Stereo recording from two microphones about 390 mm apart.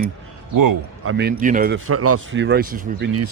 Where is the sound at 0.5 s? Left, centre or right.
Right.